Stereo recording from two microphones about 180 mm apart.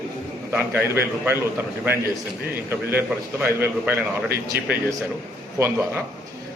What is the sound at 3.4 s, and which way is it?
Speech, 10° right (ahead or behind).